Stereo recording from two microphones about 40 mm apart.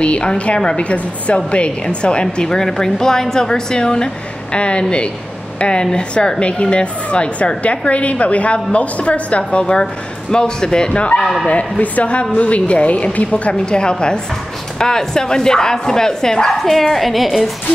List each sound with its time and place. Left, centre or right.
0.0 s a woman's voice: left
2.4 s a woman's voice: centre
11.8 s a woman's voice: left
13.7 s a woman's voice: left; by 17.5 s centre